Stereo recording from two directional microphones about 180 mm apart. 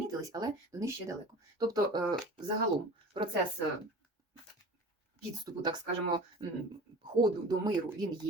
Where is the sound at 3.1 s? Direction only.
30° right (ahead or behind).